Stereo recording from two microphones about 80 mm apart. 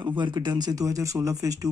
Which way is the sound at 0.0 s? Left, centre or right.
Right.